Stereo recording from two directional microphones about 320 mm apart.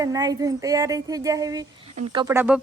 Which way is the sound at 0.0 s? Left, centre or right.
Centre.